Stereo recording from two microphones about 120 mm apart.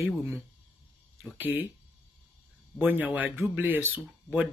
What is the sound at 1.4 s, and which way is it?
Speech, 15° right (ahead or behind).